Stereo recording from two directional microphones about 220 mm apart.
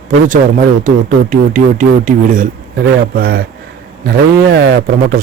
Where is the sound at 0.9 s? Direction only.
35° right (ahead or behind).